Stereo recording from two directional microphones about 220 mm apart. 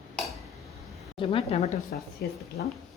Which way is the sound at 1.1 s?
25° left (ahead or behind).